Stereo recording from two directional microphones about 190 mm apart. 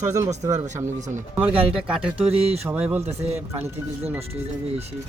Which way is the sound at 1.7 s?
5° right (ahead or behind).